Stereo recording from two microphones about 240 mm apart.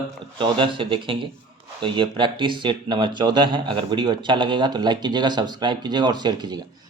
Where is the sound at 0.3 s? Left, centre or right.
Right.